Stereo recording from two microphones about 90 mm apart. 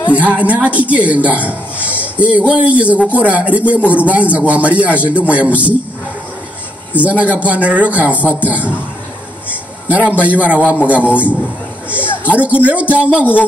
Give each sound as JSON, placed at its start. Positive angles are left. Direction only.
{"t": 0.1, "sound": "speech", "side_deg": -15}
{"t": 7.0, "sound": "speech", "side_deg": -15}
{"t": 9.5, "sound": "a sound", "side_deg": -15}
{"t": 10.2, "sound": "speech", "side_deg": -15}
{"t": 13.2, "sound": "speech", "side_deg": 20}